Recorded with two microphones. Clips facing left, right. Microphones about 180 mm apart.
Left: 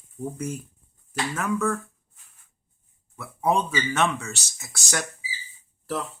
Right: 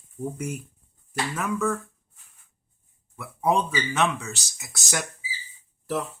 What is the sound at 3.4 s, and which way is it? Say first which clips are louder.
Speech: even; centre (ahead or behind).